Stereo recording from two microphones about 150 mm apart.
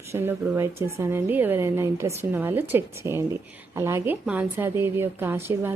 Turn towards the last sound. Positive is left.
turn(degrees=-15)  # may be behind; listen again after turning